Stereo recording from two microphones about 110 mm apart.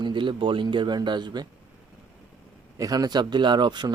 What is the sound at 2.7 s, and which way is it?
Speech, 35° right (ahead or behind).